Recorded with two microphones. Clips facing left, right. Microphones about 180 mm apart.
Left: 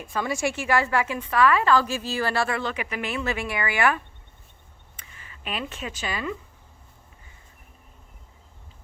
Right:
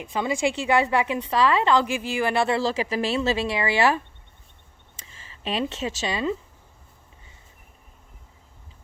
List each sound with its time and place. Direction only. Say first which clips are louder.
0.0 s a woman's voice: right 2 dB; 20° right (ahead or behind)
5.0 s a sound: right 5 dB; 25° right (ahead or behind)
6.0 s a woman's voice: right 4 dB; 25° right (ahead or behind)